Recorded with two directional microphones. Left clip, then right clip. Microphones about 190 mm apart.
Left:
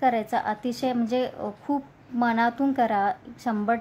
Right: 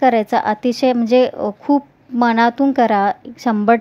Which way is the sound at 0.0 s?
40° right (ahead or behind).